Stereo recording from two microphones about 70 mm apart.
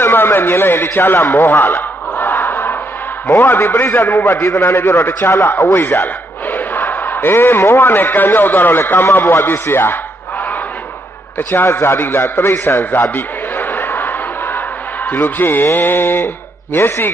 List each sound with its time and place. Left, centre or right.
0.0 s a man's voice: left
4.3 s a man's voice: left
11.3 s a man's voice: left